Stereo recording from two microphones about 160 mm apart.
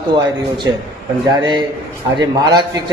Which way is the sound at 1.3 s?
30° right (ahead or behind).